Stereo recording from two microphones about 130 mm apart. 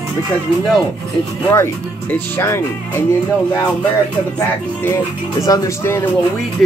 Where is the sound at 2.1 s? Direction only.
20° left (ahead or behind).